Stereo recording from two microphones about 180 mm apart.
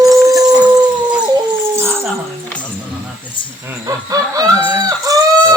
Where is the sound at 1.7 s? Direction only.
15° right (ahead or behind).